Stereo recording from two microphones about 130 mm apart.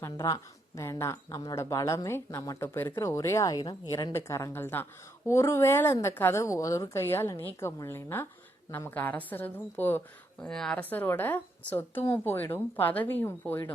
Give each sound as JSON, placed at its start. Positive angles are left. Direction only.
{"t": 0.8, "sound": "a woman's voice", "side_deg": 20}
{"t": 4.1, "sound": "a woman's voice", "side_deg": 20}
{"t": 10.4, "sound": "speech", "side_deg": 5}